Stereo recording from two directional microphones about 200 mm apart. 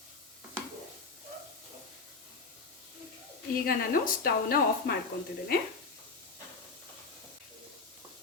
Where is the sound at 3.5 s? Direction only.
45° left (ahead or behind).